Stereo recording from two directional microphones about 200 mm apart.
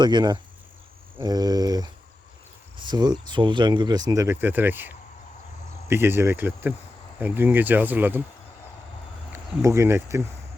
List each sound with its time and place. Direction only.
0.0 s speech: 20° right (ahead or behind)
9.6 s speech: 15° right (ahead or behind)